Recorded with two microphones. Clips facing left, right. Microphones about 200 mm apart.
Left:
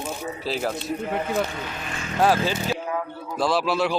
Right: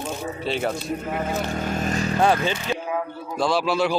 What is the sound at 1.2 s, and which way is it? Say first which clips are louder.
Speech: even; 45° right (ahead or behind).